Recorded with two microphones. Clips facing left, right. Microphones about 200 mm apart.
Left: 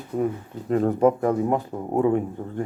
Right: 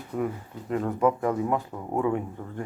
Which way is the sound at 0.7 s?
35° left (ahead or behind).